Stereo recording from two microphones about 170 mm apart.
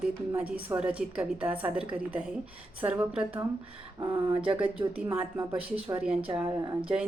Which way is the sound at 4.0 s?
30° right (ahead or behind).